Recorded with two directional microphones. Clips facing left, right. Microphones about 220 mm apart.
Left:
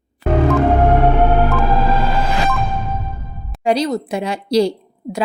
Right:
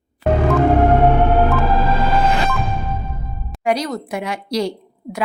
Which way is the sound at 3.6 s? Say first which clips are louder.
Left 3 dB; 30° left (ahead or behind).